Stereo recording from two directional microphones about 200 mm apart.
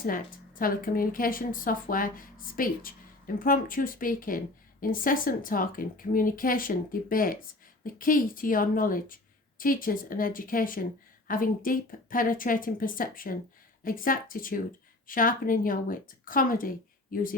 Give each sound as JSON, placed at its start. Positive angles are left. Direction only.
{"t": 0.6, "sound": "speech", "side_deg": 45}